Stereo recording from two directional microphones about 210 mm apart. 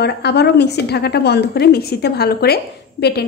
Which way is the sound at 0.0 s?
50° left (ahead or behind).